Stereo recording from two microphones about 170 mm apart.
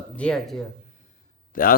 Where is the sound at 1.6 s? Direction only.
55° left (ahead or behind).